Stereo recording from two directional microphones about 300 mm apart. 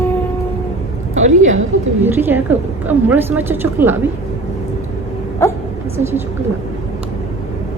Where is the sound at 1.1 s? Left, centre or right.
Right.